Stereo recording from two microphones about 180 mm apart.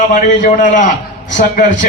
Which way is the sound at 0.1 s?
45° left (ahead or behind).